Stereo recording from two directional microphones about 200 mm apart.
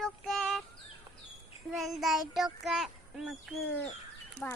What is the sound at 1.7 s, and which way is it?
A child's voice, centre (ahead or behind).